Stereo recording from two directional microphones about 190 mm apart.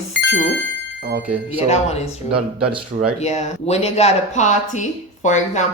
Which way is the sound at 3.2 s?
35° left (ahead or behind).